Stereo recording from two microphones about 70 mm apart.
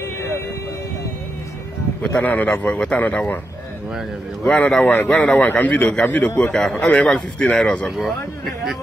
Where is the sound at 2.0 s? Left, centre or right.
Centre.